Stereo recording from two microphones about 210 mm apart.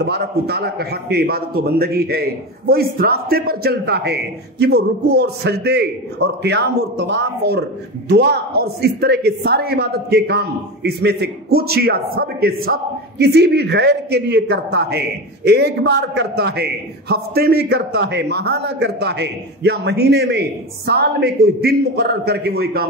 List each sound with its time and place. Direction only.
0.0 s a man's voice: 50° right (ahead or behind)